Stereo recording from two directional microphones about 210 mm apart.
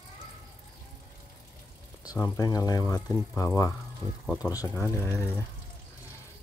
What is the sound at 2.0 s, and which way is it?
Speech, 15° left (ahead or behind).